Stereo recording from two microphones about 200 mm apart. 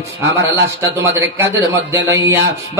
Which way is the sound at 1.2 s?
10° right (ahead or behind).